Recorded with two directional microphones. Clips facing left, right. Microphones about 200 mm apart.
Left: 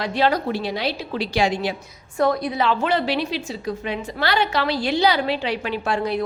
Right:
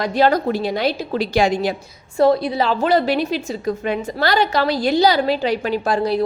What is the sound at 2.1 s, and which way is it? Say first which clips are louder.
A woman's voice: right 5 dB; 30° right (ahead or behind).